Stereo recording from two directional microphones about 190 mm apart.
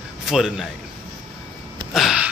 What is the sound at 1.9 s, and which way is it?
Gasp, 5° right (ahead or behind).